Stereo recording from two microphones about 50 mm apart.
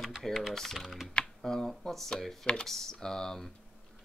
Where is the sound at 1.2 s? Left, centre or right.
Centre.